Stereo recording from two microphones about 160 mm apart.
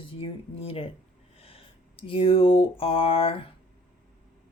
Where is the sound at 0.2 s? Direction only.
35° left (ahead or behind).